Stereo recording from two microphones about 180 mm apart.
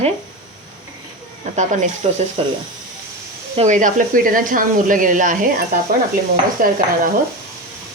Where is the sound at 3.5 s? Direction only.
45° right (ahead or behind).